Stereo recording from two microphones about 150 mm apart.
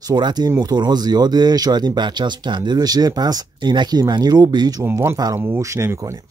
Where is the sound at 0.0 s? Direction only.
30° right (ahead or behind).